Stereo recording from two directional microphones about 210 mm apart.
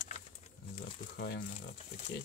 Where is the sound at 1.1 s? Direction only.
50° left (ahead or behind).